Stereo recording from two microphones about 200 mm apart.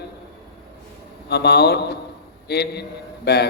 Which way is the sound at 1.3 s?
55° left (ahead or behind).